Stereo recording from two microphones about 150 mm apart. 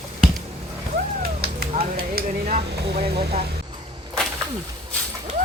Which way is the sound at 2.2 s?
50° right (ahead or behind).